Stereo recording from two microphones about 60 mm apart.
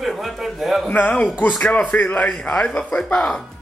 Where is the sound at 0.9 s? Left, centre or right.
Left.